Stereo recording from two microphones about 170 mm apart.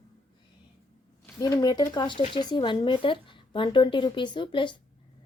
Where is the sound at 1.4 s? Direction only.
20° left (ahead or behind).